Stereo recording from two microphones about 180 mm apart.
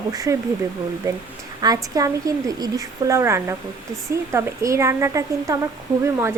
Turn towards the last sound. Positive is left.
turn(degrees=-15)  # may be behind; listen again after turning